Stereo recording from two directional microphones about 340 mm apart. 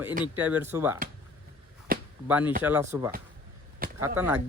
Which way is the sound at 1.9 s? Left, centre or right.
Right.